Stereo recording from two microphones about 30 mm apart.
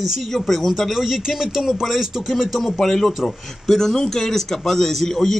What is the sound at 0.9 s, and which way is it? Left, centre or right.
Speech, centre.